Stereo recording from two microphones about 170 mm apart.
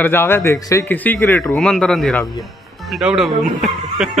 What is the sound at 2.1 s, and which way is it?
Speech, 20° left (ahead or behind).